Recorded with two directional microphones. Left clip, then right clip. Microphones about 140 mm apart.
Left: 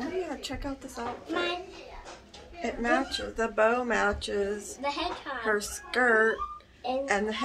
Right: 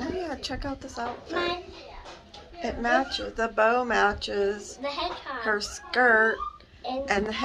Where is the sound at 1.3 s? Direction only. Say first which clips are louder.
Right 1 dB; 20° left (ahead or behind).